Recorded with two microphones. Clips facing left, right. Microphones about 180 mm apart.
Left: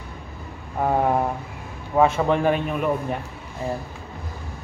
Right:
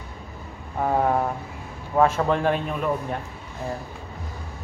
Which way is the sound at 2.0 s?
5° left (ahead or behind).